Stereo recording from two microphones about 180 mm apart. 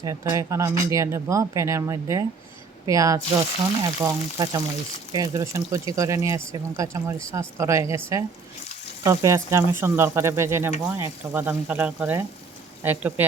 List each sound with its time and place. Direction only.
0.0 s speech: 20° right (ahead or behind)
3.8 s frying: 20° right (ahead or behind)
5.1 s speech: 20° right (ahead or behind)